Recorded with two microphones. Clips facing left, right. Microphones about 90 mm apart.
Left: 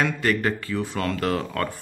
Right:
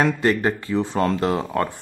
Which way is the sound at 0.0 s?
25° right (ahead or behind).